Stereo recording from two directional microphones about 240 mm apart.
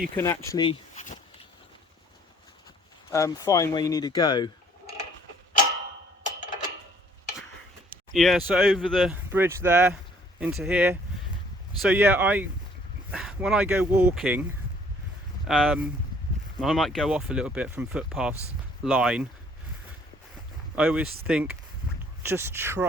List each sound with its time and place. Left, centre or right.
0.2 s speech: centre; by 1.2 s left
3.1 s speech: centre
6.2 s a sound: left
7.9 s speech: centre
15.4 s speech: centre
20.7 s speech: centre